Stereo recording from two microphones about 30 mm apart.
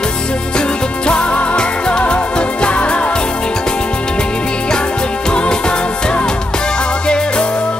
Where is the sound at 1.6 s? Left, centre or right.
Left.